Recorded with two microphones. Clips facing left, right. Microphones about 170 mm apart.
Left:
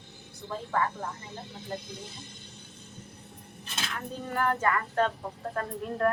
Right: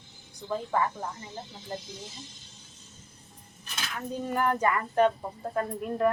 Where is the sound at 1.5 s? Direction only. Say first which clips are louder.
Left 3 dB; 55° left (ahead or behind).